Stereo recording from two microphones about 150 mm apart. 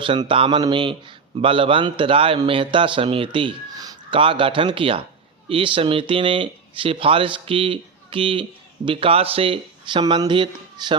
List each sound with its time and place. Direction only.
0.0 s speech: 35° right (ahead or behind)